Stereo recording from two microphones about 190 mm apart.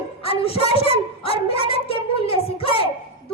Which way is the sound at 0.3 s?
30° left (ahead or behind).